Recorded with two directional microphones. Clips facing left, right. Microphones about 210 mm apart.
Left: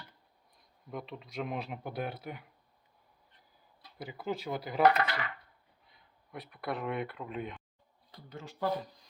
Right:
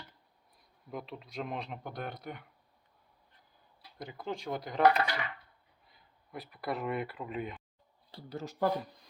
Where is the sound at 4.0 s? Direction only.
5° left (ahead or behind).